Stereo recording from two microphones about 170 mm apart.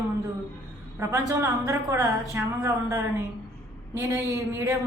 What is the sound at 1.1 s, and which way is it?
A woman's voice, 15° right (ahead or behind).